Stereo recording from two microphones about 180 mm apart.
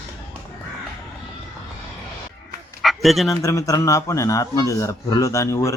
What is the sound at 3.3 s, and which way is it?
A man's voice, 20° left (ahead or behind).